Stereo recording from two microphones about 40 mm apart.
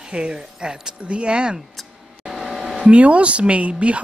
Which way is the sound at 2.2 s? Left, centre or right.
Centre.